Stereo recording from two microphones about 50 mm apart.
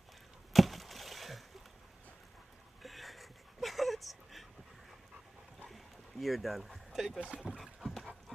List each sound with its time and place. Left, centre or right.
0.5 s chop: centre
2.8 s a sound: centre
5.7 s boat: centre